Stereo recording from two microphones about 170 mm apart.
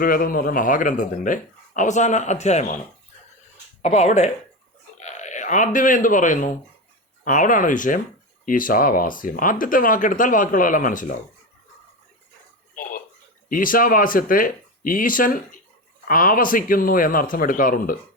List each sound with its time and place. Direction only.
0.0 s speech: 55° left (ahead or behind)
3.8 s speech: 40° left (ahead or behind)
13.5 s speech: 55° left (ahead or behind)